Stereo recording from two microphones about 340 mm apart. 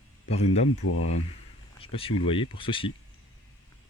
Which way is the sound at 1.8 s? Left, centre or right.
Centre.